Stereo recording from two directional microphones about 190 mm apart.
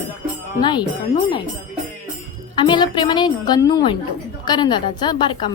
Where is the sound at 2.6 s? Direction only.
25° left (ahead or behind).